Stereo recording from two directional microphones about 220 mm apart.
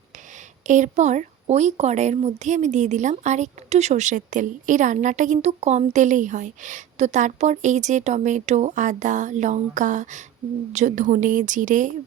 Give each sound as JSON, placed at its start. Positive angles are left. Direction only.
{"t": 0.7, "sound": "a woman's voice", "side_deg": -35}